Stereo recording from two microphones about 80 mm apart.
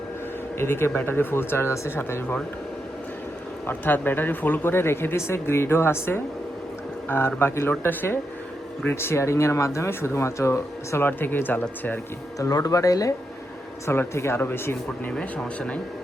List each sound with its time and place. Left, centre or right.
0.6 s speech: left
3.7 s speech: left
12.4 s speech: left
13.8 s speech: left
15.1 s speech: centre